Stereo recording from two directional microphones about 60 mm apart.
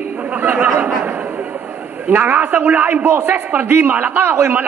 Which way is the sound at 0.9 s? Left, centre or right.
Right.